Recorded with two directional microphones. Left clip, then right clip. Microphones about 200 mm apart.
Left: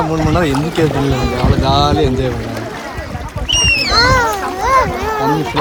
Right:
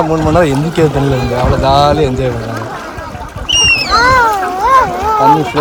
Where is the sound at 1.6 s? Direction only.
20° left (ahead or behind).